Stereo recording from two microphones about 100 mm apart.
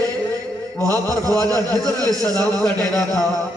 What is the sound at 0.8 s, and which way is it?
Speech, 35° right (ahead or behind).